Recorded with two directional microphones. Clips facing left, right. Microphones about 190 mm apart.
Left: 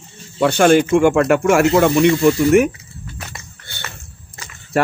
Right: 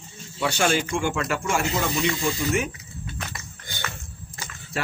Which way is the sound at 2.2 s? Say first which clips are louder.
Left 13 dB; 65° left (ahead or behind).